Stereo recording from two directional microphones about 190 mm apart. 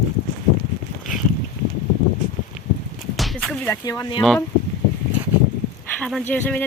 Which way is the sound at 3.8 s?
20° left (ahead or behind).